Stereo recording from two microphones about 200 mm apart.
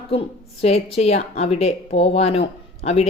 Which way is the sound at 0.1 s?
30° left (ahead or behind).